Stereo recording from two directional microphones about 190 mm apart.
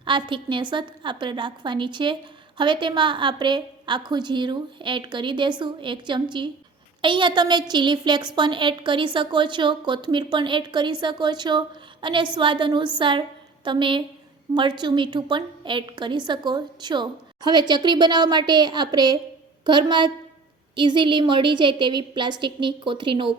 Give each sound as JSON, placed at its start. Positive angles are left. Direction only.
{"t": 0.0, "sound": "a woman's voice", "side_deg": -25}